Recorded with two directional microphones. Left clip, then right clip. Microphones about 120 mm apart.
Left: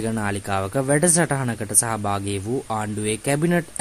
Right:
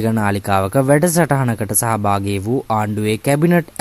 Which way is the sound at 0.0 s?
35° right (ahead or behind).